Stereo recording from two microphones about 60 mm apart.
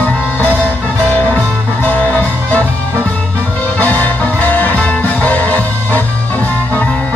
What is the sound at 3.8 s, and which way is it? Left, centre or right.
Music, left.